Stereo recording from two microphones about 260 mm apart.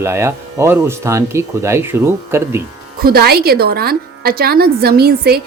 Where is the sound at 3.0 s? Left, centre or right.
Right.